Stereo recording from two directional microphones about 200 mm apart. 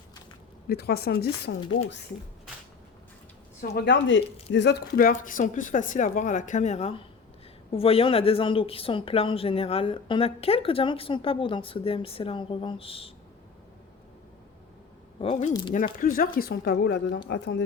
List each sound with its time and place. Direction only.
0.7 s speech: 50° left (ahead or behind)
3.6 s speech: 55° left (ahead or behind); by 13.1 s 30° left (ahead or behind)
15.2 s speech: 30° left (ahead or behind); by 17.6 s 60° left (ahead or behind)